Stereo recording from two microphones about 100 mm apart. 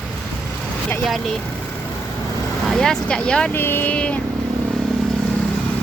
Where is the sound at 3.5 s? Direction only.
20° left (ahead or behind).